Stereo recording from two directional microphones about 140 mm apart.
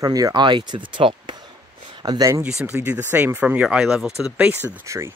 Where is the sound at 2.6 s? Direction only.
10° right (ahead or behind).